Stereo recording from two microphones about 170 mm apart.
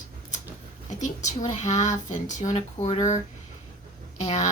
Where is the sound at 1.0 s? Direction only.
45° left (ahead or behind).